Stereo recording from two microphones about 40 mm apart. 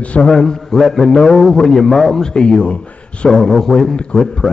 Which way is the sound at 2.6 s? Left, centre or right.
Left.